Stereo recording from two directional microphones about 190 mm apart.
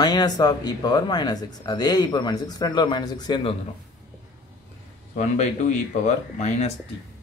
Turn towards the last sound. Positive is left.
turn(degrees=35)  # may be behind; listen again after turning